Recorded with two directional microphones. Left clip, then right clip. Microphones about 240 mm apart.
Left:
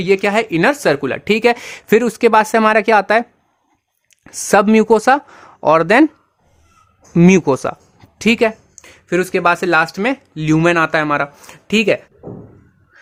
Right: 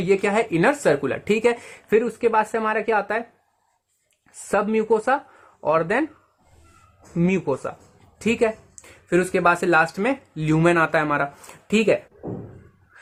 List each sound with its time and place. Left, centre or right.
0.0 s speech: left
7.2 s speech: left